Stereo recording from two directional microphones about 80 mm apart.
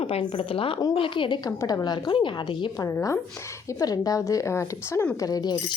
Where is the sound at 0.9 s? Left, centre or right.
Left.